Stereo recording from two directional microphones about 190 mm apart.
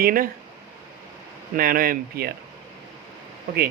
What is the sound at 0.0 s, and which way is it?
Speech, 50° right (ahead or behind).